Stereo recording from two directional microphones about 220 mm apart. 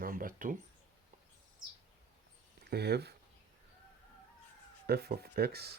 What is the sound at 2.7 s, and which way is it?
Speech, 50° right (ahead or behind).